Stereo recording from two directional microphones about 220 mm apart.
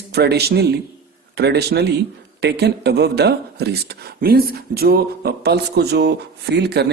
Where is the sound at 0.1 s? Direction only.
50° right (ahead or behind).